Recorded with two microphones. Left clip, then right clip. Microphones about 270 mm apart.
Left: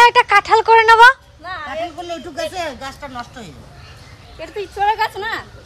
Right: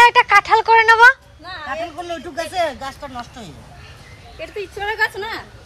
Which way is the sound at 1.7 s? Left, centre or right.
Right.